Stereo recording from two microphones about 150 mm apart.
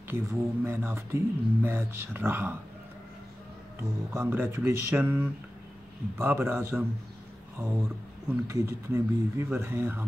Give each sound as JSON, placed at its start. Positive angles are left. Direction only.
{"t": 0.1, "sound": "speech", "side_deg": -15}
{"t": 4.1, "sound": "speech", "side_deg": -15}